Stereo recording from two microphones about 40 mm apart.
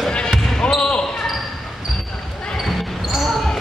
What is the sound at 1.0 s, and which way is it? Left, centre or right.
Basketball bounce, centre.